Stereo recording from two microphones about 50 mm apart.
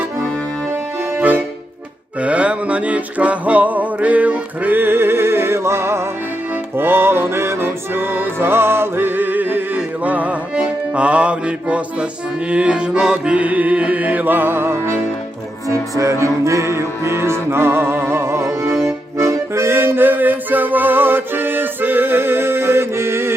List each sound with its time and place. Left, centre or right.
2.2 s music: right
6.7 s music: right
15.7 s music: right
17.1 s music: right